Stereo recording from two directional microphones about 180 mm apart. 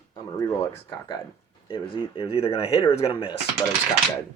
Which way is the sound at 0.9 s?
25° left (ahead or behind).